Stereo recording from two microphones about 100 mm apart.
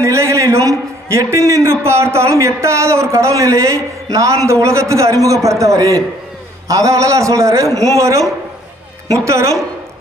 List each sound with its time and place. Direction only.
0.0 s a sound: 30° right (ahead or behind)
0.7 s a man's voice: 30° right (ahead or behind)
9.2 s a woman's voice: 30° right (ahead or behind)